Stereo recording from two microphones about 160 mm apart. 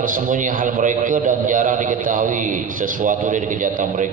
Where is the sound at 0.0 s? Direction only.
55° right (ahead or behind).